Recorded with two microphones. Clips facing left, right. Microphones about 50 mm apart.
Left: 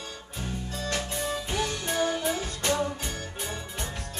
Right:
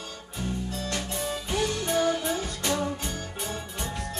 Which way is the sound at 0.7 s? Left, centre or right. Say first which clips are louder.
Even; centre.